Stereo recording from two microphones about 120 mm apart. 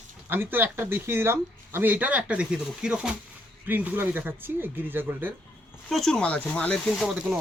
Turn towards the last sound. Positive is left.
turn(degrees=0)  # may be behind; listen again after turning